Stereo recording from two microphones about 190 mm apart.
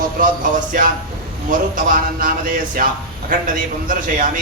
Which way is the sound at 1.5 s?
45° right (ahead or behind).